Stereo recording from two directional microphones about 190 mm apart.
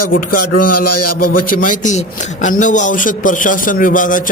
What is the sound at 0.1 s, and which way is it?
A man's voice, 50° left (ahead or behind).